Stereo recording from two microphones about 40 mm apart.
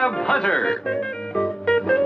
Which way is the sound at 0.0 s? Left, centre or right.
Centre.